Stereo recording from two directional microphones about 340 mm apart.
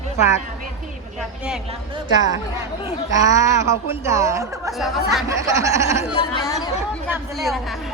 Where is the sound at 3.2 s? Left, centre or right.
Centre.